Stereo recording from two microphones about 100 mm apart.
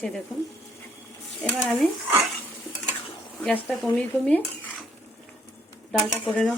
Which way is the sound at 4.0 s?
15° left (ahead or behind).